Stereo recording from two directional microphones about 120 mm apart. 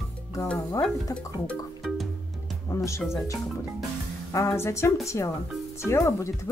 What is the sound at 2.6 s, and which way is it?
Music, 25° left (ahead or behind).